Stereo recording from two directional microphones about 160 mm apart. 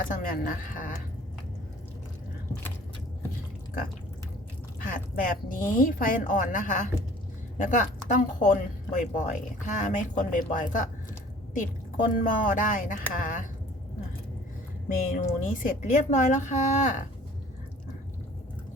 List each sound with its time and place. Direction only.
0.0 s speech: 60° left (ahead or behind)
4.8 s a woman's voice: 60° left (ahead or behind)
12.0 s speech: 55° left (ahead or behind)
14.9 s a woman's voice: 50° left (ahead or behind)